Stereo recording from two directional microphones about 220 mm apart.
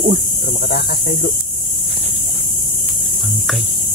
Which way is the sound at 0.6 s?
45° left (ahead or behind).